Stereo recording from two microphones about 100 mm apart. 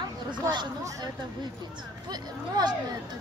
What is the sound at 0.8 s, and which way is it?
Speech, 35° right (ahead or behind).